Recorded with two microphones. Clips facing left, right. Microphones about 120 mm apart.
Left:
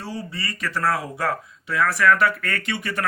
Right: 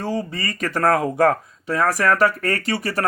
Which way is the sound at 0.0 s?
50° right (ahead or behind).